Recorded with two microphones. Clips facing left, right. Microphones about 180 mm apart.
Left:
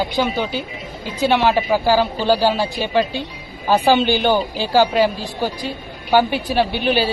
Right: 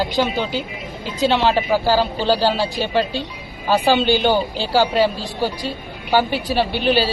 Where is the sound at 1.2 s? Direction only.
15° left (ahead or behind).